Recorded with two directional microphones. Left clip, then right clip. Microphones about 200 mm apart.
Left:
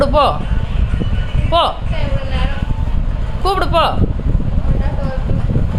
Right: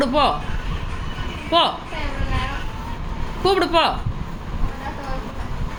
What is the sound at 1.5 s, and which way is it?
Speech, 20° left (ahead or behind).